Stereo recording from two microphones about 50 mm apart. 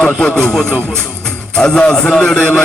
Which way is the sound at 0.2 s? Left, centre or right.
Centre.